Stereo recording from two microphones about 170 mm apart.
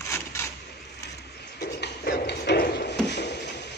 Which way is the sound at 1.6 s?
75° left (ahead or behind).